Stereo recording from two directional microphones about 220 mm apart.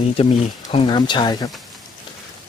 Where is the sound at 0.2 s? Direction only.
25° left (ahead or behind).